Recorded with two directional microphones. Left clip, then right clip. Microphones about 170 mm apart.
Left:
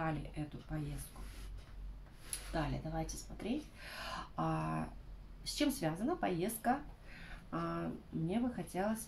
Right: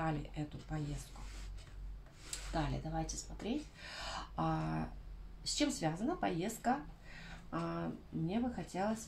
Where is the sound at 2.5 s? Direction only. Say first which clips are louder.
Even; 20° right (ahead or behind).